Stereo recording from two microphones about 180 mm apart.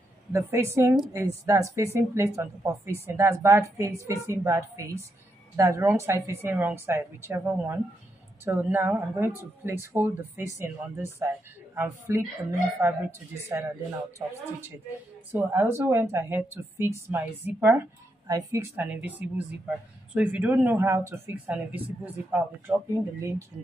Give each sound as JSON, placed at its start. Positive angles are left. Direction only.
{"t": 0.3, "sound": "speech", "side_deg": -15}
{"t": 15.3, "sound": "speech", "side_deg": -10}